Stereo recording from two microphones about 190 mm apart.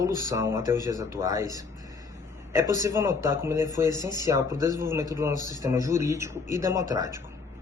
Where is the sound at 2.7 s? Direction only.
15° right (ahead or behind).